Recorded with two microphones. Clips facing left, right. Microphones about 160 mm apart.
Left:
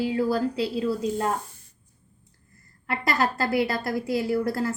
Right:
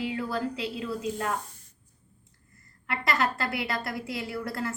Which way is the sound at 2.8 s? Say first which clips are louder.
Left 3 dB; 35° left (ahead or behind).